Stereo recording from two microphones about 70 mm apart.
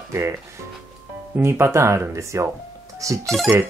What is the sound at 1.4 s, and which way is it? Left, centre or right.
Speech, right.